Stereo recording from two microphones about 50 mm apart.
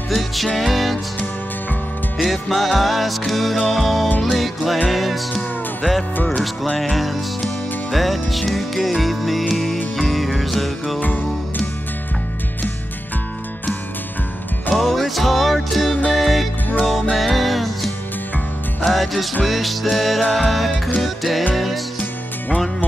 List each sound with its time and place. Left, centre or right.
0.6 s music: centre
2.2 s music: centre
11.0 s music: left
14.7 s music: centre